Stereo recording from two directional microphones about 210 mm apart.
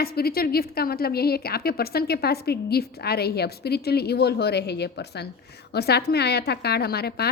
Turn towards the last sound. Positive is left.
turn(degrees=50)  # may be behind; listen again after turning